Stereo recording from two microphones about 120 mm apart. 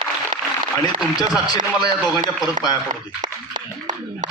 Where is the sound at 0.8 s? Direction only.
30° left (ahead or behind).